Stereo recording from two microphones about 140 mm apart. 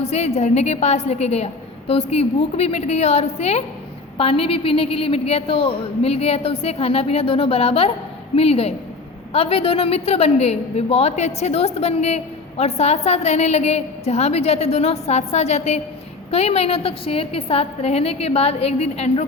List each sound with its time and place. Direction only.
0.0 s a woman's voice: 50° left (ahead or behind)